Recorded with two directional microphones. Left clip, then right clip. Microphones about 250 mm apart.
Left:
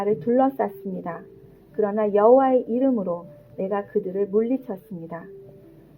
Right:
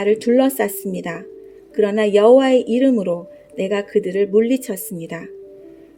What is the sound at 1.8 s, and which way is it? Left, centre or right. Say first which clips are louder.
Speech: right 5 dB; right.